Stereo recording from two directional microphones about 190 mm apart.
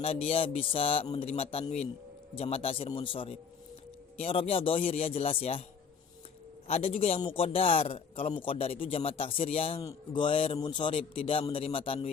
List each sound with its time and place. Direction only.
0.0 s a man's voice: 30° left (ahead or behind)
6.7 s a man's voice: 30° left (ahead or behind)